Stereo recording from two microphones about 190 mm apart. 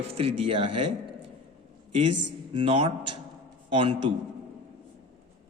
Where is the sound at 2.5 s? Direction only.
25° right (ahead or behind).